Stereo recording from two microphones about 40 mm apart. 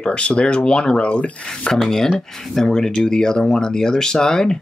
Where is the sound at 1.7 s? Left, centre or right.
Centre.